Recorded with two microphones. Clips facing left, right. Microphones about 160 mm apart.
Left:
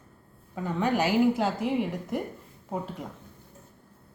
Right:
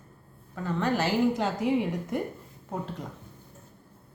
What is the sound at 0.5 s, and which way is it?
A woman's voice, 15° left (ahead or behind).